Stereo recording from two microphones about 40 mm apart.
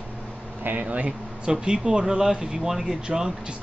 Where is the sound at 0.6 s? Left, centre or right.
Right.